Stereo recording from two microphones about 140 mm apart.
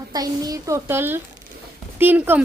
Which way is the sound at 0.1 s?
25° right (ahead or behind).